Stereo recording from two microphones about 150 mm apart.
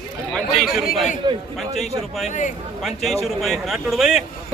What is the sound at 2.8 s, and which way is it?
Speech, centre (ahead or behind).